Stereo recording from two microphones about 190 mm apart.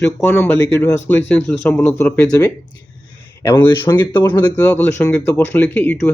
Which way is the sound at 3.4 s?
15° left (ahead or behind).